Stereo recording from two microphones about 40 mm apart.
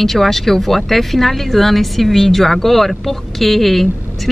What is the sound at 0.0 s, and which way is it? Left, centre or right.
Speech, centre.